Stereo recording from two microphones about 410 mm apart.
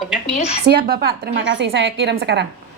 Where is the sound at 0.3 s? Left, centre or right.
Centre.